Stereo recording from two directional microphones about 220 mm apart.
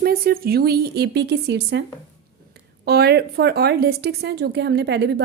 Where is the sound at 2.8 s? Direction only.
45° right (ahead or behind).